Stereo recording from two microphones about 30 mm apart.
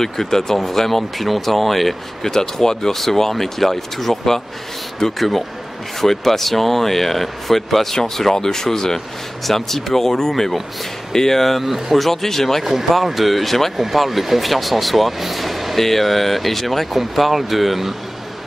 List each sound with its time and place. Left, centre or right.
0.0 s speech: centre
2.2 s speech: centre
5.0 s speech: centre
12.1 s speech: centre
12.6 s speech: centre